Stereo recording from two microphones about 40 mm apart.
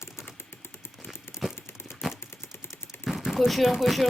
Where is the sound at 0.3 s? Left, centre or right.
Left.